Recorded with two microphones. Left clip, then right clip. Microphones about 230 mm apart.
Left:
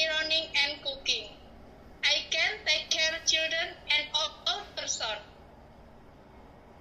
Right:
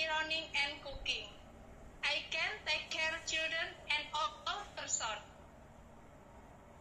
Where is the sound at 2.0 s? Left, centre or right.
Centre.